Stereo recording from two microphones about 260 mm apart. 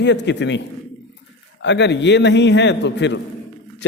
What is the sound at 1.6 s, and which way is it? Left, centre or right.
A man's voice, left.